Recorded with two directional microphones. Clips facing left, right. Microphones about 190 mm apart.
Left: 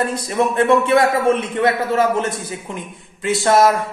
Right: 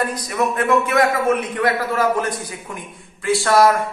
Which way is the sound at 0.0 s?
25° left (ahead or behind).